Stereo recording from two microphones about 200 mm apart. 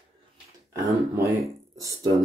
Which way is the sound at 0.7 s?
15° right (ahead or behind).